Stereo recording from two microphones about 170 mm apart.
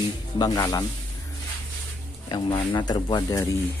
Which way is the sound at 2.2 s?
30° left (ahead or behind).